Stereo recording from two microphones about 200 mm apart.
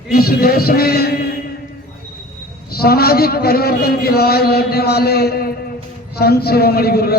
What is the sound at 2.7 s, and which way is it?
A man's voice, 50° left (ahead or behind).